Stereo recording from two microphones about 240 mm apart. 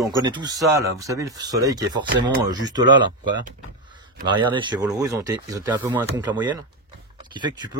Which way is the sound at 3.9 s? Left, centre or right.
Centre.